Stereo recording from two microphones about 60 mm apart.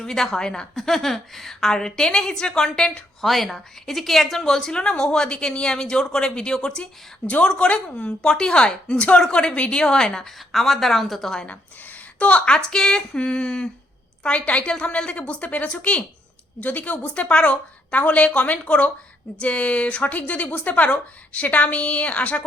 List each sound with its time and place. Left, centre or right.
0.0 s a woman's voice: centre
3.2 s a woman's voice: centre
11.4 s a woman's voice: left